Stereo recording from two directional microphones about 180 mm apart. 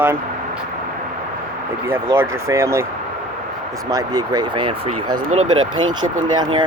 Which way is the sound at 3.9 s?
20° right (ahead or behind).